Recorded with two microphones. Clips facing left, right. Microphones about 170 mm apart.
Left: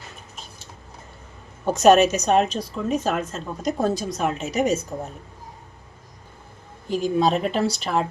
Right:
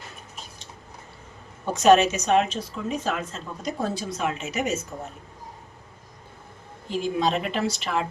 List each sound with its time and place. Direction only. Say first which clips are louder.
1.7 s a woman's voice: left 2 dB; 45° left (ahead or behind)
6.8 s a woman's voice: left 4 dB; 40° left (ahead or behind)